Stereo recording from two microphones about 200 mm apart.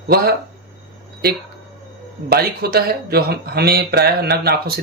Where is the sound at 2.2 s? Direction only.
50° right (ahead or behind).